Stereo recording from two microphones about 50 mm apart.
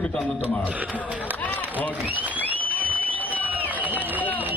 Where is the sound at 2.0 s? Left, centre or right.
Right.